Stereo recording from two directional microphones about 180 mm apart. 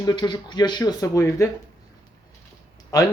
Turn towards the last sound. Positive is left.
turn(degrees=20)  # may be behind; listen again after turning